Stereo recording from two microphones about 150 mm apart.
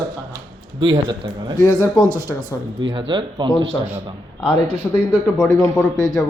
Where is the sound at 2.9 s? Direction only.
35° right (ahead or behind).